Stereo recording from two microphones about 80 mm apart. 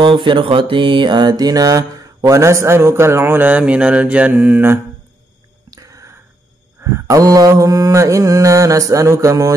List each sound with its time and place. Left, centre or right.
0.0 s mantra: right
5.7 s a sound: right
6.8 s mantra: right